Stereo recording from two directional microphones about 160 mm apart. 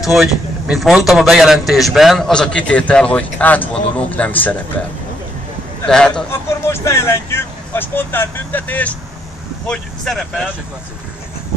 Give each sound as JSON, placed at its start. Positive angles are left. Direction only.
{"t": 0.1, "sound": "a man's voice", "side_deg": 0}
{"t": 5.9, "sound": "a man's voice", "side_deg": 5}
{"t": 6.3, "sound": "a man's voice", "side_deg": 15}